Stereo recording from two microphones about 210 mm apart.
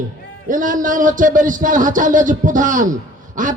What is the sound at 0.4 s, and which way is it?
A man's voice, 40° right (ahead or behind).